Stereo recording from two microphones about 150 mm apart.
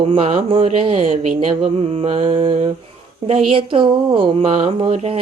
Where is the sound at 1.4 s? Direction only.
40° right (ahead or behind).